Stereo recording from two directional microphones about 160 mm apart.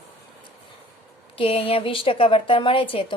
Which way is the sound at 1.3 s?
35° left (ahead or behind).